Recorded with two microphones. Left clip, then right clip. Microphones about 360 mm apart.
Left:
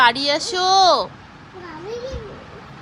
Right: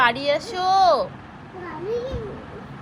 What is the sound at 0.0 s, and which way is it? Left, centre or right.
Speech, centre.